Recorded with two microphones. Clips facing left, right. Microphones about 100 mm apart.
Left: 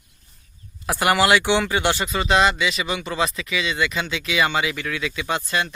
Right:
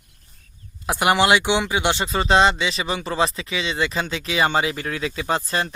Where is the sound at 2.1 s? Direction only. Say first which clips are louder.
Right 3 dB; 35° right (ahead or behind).